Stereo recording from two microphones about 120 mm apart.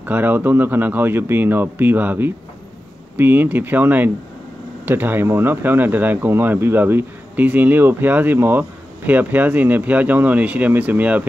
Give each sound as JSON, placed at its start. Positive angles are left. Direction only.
{"t": 0.0, "sound": "speech", "side_deg": -15}